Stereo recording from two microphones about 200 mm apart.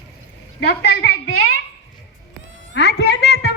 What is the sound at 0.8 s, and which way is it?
Speech, 60° left (ahead or behind).